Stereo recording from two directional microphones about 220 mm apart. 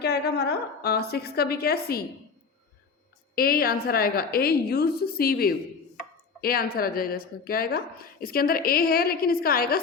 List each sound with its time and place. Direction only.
0.0 s speech: 50° left (ahead or behind)
3.3 s speech: 40° left (ahead or behind)